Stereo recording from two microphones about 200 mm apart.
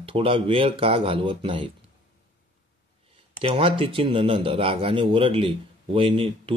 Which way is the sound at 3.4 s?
30° right (ahead or behind).